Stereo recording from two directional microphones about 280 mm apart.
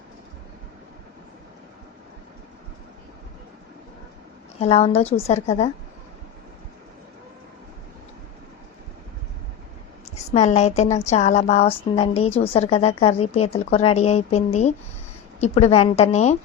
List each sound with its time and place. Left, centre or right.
4.6 s a woman's voice: left
10.3 s a woman's voice: left